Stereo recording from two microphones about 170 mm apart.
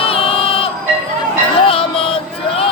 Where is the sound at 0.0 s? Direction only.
35° left (ahead or behind).